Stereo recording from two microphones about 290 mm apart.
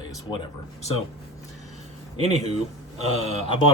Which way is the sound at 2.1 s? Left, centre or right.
Right.